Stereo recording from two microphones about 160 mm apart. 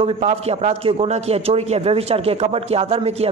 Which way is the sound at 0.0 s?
40° right (ahead or behind).